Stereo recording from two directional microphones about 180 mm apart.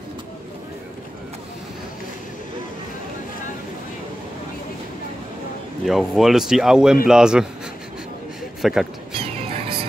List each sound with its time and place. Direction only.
5.9 s speech: centre (ahead or behind)
8.6 s speech: centre (ahead or behind)
9.2 s music: 30° right (ahead or behind)